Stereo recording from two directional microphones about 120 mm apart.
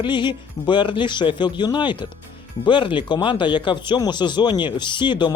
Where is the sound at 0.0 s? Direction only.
40° left (ahead or behind).